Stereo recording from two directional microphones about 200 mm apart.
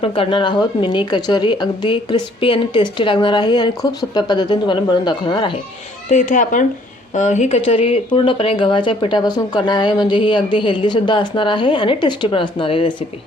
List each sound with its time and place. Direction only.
0.0 s speech: 25° left (ahead or behind)
6.1 s speech: 40° left (ahead or behind)